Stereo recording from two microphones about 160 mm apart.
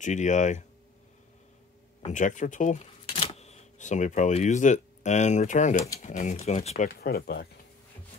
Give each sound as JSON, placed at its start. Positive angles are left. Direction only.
{"t": 0.0, "sound": "speech", "side_deg": 50}
{"t": 2.0, "sound": "speech", "side_deg": 50}
{"t": 6.9, "sound": "speech", "side_deg": 70}